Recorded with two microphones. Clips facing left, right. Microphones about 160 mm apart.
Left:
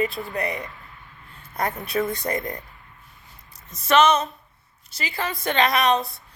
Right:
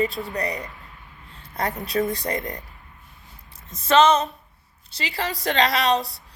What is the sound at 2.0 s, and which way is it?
Speech, 20° right (ahead or behind).